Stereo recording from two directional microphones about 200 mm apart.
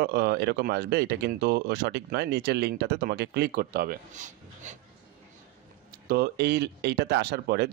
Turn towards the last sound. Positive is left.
turn(degrees=-50)  # may be behind; listen again after turning